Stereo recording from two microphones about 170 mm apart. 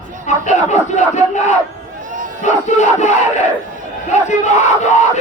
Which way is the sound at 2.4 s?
45° left (ahead or behind).